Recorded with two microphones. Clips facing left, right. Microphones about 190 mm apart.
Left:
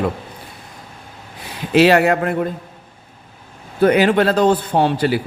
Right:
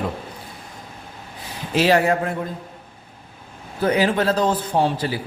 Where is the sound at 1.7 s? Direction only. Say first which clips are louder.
Left 5 dB; 70° left (ahead or behind).